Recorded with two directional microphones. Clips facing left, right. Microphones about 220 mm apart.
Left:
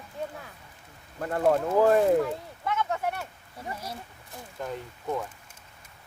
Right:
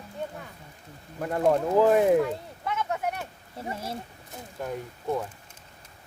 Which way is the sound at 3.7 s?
25° right (ahead or behind).